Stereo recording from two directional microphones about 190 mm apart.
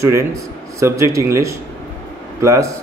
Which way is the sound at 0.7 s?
15° right (ahead or behind).